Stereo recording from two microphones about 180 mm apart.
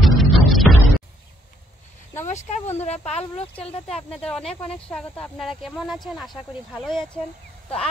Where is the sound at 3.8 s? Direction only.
5° left (ahead or behind).